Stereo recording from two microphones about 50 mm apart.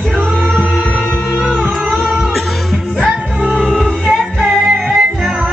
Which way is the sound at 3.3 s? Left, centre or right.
Right.